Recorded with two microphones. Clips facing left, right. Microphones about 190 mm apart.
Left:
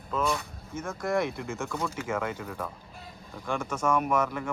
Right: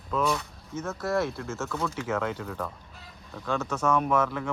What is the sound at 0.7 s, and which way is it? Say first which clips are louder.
Speech: right 1 dB; 10° left (ahead or behind).